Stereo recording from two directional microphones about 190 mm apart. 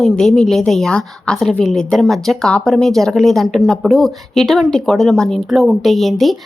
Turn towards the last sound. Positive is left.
turn(degrees=0)  # may be behind; listen again after turning